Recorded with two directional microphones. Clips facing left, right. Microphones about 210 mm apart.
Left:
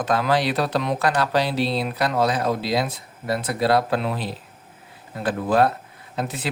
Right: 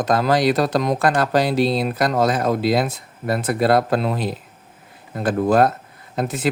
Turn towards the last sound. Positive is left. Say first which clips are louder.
# right 4 dB
turn(degrees=-45)  # may be behind; listen again after turning